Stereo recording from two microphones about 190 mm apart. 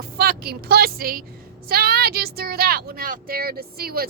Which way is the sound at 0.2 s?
55° right (ahead or behind).